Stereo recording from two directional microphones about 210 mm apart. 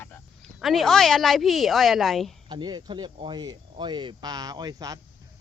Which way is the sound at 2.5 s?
20° right (ahead or behind).